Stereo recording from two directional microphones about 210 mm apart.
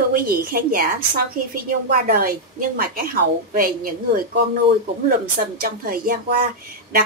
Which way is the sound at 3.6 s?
45° right (ahead or behind).